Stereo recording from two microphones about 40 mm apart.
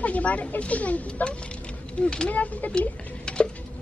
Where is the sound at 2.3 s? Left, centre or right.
Left.